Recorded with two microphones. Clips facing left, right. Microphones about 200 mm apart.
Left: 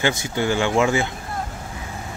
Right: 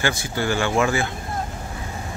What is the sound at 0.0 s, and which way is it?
Speech, 20° left (ahead or behind).